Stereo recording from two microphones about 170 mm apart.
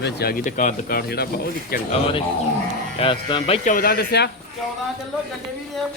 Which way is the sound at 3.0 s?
30° left (ahead or behind).